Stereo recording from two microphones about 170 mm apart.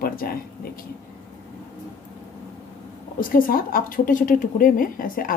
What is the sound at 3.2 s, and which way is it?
Speech, 55° left (ahead or behind).